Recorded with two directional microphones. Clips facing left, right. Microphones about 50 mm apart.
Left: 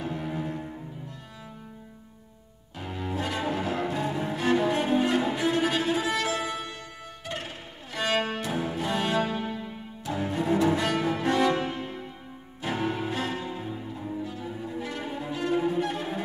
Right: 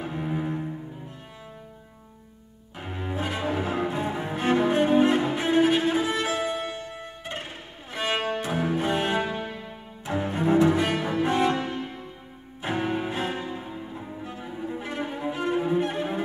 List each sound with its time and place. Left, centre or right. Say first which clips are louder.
0.0 s cello: right 2 dB; right
2.8 s cello: right 1 dB; right
7.9 s music: even; right
8.4 s cello: right 4 dB; right
10.0 s music: right 3 dB; right
10.7 s cello: right 1 dB; centre
12.6 s cello: right 2 dB; right
14.2 s cello: right 1 dB; right